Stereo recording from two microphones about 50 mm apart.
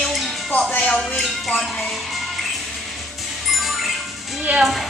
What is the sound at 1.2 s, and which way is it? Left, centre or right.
Speech, centre.